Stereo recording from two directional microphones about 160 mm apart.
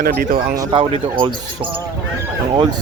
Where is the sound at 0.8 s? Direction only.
35° right (ahead or behind).